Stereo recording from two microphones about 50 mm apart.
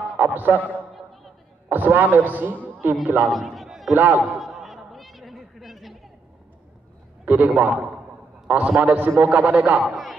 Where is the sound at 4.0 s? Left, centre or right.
Right.